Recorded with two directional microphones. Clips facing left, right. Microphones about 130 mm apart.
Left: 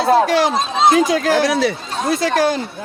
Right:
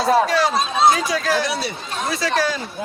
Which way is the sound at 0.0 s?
55° left (ahead or behind).